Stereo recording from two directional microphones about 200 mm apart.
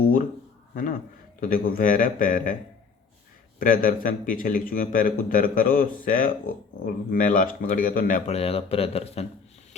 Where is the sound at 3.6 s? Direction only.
45° left (ahead or behind).